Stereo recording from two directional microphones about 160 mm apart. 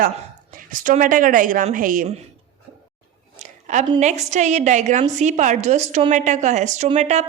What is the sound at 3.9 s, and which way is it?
A woman's voice, 45° right (ahead or behind).